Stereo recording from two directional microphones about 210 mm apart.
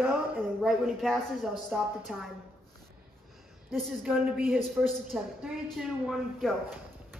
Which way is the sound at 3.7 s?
Centre (ahead or behind).